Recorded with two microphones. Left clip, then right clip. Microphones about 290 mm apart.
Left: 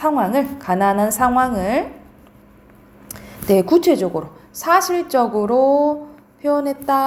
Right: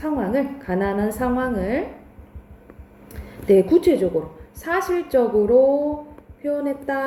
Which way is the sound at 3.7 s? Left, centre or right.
Centre.